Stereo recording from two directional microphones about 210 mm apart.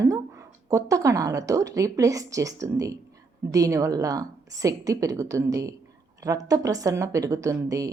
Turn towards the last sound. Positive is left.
turn(degrees=-15)  # may be behind; listen again after turning